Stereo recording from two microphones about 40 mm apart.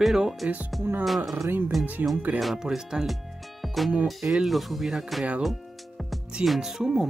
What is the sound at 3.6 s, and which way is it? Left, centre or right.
Music, centre.